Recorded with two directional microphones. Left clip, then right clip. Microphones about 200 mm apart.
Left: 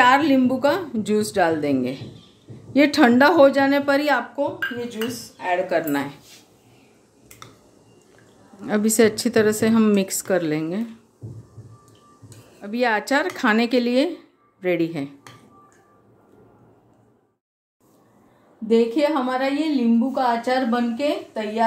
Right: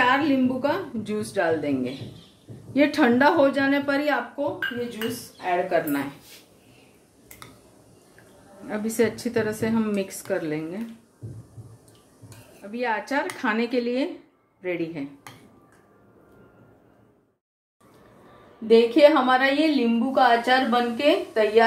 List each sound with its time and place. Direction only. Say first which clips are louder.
0.0 s speech: left 5 dB; 50° left (ahead or behind)
8.6 s speech: left 6 dB; 55° left (ahead or behind)
12.6 s speech: left 6 dB; 50° left (ahead or behind)
18.7 s a woman's voice: right 3 dB; 40° left (ahead or behind)